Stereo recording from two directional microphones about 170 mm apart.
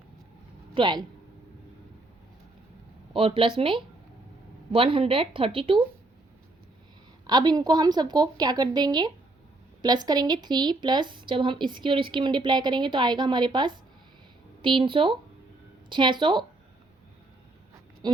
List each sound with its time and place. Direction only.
0.7 s speech: 25° right (ahead or behind)
3.1 s speech: 30° right (ahead or behind)
7.3 s speech: 25° right (ahead or behind)
18.0 s a sound: 25° right (ahead or behind)